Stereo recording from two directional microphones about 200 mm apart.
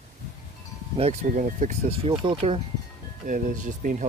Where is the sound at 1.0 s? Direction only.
35° right (ahead or behind).